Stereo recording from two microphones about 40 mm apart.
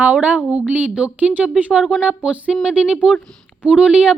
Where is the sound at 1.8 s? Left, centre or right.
Centre.